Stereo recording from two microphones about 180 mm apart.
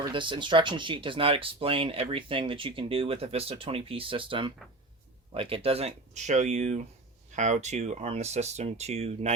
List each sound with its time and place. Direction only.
0.1 s speech: 25° right (ahead or behind)